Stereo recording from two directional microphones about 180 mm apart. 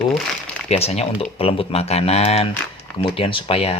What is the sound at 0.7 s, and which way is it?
Speech, 35° left (ahead or behind).